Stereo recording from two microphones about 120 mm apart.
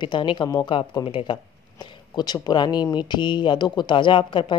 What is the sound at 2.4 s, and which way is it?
Speech, 35° left (ahead or behind).